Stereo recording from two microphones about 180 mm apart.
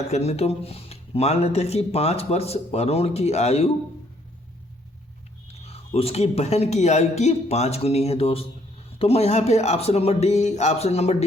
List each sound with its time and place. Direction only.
0.1 s speech: 35° left (ahead or behind)
5.5 s speech: 35° left (ahead or behind)